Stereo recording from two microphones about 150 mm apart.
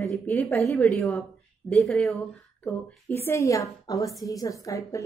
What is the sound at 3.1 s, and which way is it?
A woman's voice, 15° left (ahead or behind).